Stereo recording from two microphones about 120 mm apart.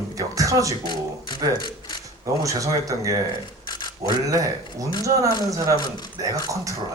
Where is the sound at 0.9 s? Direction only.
40° left (ahead or behind).